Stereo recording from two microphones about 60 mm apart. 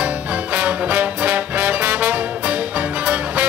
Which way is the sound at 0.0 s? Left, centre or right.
Right.